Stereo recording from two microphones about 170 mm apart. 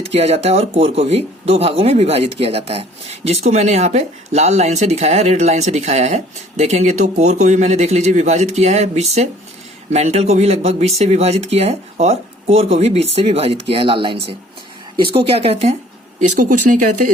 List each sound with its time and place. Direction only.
0.0 s speech: 40° right (ahead or behind)
16.3 s speech: 50° right (ahead or behind)